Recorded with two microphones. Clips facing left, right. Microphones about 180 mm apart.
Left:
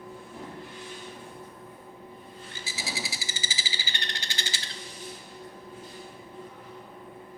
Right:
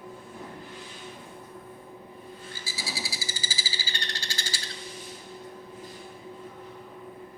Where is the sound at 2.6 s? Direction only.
20° left (ahead or behind).